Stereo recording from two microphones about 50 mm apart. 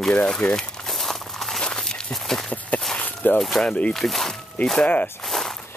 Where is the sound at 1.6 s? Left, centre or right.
Centre.